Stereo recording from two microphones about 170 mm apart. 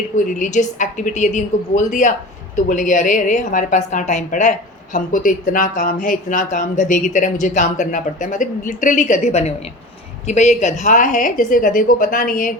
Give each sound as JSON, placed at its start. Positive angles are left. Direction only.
{"t": 0.3, "sound": "speech", "side_deg": 45}